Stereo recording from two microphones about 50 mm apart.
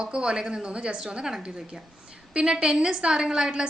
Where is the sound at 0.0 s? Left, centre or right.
Centre.